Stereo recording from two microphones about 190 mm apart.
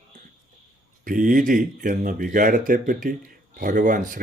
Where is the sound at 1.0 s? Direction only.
45° right (ahead or behind).